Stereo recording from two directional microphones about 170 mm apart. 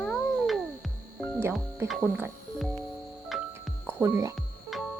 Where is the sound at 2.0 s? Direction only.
10° right (ahead or behind).